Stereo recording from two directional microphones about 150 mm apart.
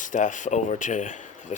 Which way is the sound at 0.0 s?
60° left (ahead or behind).